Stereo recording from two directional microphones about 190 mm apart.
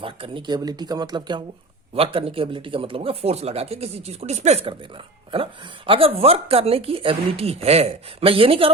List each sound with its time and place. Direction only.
0.0 s speech: 25° right (ahead or behind)